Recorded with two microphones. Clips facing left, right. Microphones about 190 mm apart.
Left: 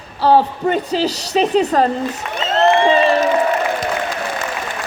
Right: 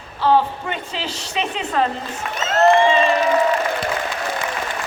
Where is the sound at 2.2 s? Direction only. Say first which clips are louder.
Left 3 dB; centre (ahead or behind).